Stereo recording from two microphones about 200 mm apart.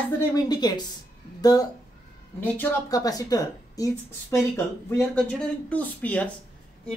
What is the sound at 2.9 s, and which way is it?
Speech, 20° left (ahead or behind).